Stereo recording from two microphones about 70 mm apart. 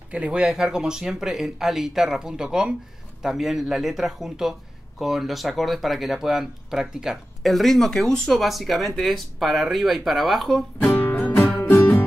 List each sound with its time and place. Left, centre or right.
0.1 s speech: centre
10.8 s music: left